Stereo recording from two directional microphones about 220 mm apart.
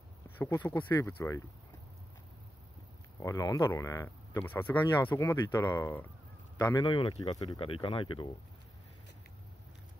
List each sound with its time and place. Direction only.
0.4 s speech: 10° left (ahead or behind)
3.2 s speech: 15° left (ahead or behind)